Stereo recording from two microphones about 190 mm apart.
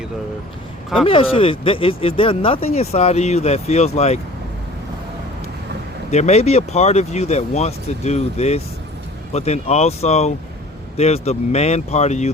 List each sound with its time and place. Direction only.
1.0 s speech: 30° left (ahead or behind)
6.1 s speech: 35° left (ahead or behind)